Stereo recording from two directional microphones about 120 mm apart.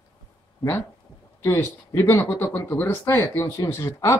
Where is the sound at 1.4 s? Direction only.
20° left (ahead or behind).